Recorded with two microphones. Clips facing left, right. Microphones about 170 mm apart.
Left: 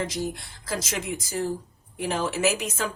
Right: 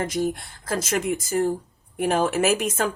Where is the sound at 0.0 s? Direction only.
50° right (ahead or behind).